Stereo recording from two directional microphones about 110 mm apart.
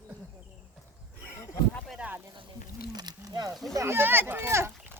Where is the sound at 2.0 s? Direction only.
15° right (ahead or behind).